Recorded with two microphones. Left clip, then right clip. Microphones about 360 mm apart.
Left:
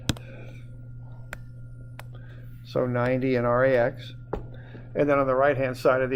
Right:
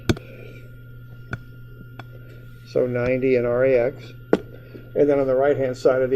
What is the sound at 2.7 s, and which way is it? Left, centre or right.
Speech, left.